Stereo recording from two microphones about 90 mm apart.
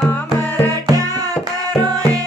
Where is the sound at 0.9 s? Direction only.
40° right (ahead or behind).